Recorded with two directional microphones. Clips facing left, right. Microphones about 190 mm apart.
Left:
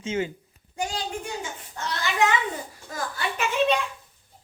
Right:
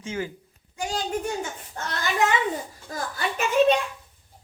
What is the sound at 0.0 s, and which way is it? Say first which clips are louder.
Speech: left 3 dB; 20° left (ahead or behind).